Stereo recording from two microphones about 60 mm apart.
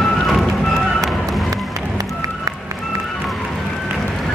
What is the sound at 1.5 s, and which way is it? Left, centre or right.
Run, right.